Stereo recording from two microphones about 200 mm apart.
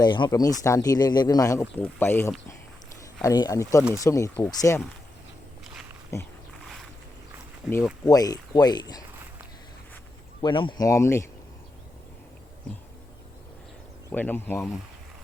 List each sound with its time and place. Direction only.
0.0 s speech: 20° left (ahead or behind)
6.1 s speech: 15° left (ahead or behind)
6.5 s boat: centre (ahead or behind)
7.6 s speech: centre (ahead or behind)
8.0 s speech: 20° left (ahead or behind)
10.4 s speech: 25° left (ahead or behind)
14.1 s speech: 10° left (ahead or behind)